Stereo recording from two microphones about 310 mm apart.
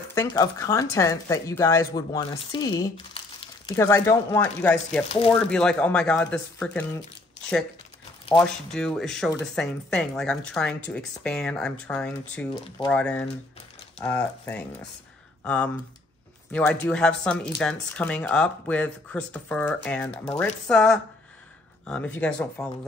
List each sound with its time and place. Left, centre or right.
0.1 s speech: centre
5.0 s speech: centre
5.3 s speech: centre
8.4 s speech: centre